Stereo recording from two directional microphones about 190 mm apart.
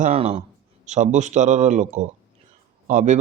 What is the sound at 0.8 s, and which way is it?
Speech, 40° right (ahead or behind).